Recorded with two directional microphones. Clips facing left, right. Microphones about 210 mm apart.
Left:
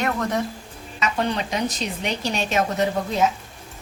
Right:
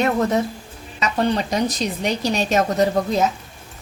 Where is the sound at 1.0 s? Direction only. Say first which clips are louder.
Right 4 dB; 35° right (ahead or behind).